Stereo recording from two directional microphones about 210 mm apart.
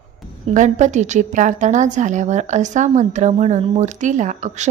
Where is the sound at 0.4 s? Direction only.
35° right (ahead or behind).